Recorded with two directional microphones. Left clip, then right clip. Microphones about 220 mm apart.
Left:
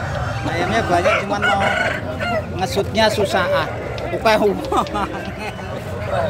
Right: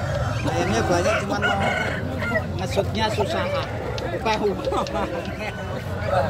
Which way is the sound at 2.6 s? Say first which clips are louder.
Left 10 dB; 30° left (ahead or behind).